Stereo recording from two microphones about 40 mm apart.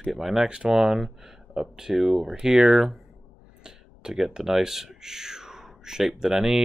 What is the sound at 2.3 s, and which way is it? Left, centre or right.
Speech, right.